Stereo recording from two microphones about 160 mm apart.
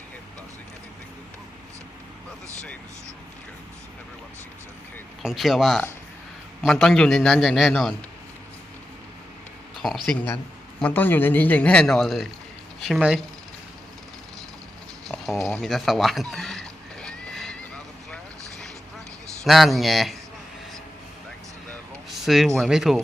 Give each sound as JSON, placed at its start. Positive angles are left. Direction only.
{"t": 5.2, "sound": "a man's voice", "side_deg": 0}
{"t": 9.7, "sound": "a man's voice", "side_deg": 0}
{"t": 15.0, "sound": "a sound", "side_deg": 0}
{"t": 15.4, "sound": "speech", "side_deg": 15}
{"t": 15.6, "sound": "neigh", "side_deg": 0}
{"t": 19.5, "sound": "a man's voice", "side_deg": 0}
{"t": 22.1, "sound": "a sound", "side_deg": 0}
{"t": 22.5, "sound": "a man's voice", "side_deg": 0}